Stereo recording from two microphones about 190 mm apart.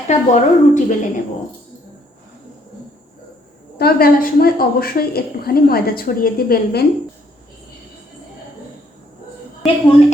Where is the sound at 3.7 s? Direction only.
55° left (ahead or behind).